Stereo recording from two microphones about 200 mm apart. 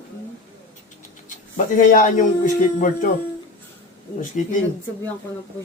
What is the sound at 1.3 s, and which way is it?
A man's voice, 40° left (ahead or behind).